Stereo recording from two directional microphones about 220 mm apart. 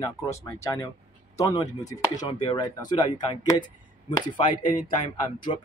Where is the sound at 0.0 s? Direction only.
15° left (ahead or behind).